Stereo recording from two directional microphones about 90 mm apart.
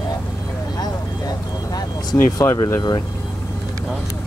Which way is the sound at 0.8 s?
45° left (ahead or behind).